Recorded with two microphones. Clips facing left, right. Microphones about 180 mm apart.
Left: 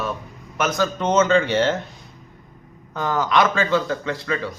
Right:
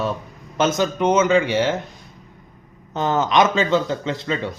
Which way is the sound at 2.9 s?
25° right (ahead or behind).